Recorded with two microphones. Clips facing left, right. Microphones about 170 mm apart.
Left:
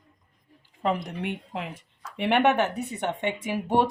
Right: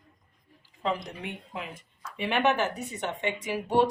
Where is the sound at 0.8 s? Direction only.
60° left (ahead or behind); by 1.9 s 80° left.